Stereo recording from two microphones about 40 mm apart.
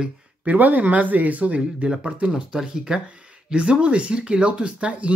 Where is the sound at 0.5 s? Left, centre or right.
Right.